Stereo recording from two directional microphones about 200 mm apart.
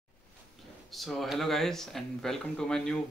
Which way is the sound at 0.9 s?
Centre (ahead or behind).